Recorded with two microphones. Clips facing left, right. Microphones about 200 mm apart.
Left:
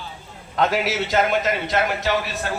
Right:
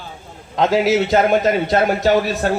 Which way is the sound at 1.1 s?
35° right (ahead or behind).